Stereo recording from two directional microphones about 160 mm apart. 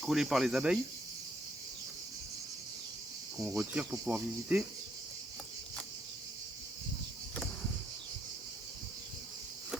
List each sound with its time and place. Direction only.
0.0 s speech: centre (ahead or behind)
3.4 s speech: 10° right (ahead or behind)